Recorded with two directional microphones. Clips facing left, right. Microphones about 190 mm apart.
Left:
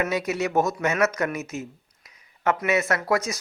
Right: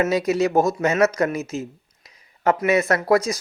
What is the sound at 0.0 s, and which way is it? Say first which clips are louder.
Speech: right 6 dB; 35° right (ahead or behind).